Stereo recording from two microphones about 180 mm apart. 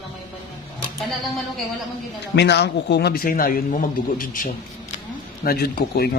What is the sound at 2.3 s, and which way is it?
A man's voice, 70° left (ahead or behind).